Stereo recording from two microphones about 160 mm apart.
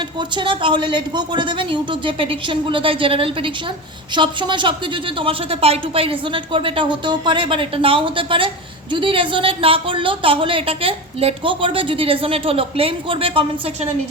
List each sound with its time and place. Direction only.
0.2 s speech: 30° right (ahead or behind)